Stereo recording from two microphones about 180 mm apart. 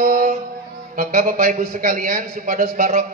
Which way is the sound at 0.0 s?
50° right (ahead or behind).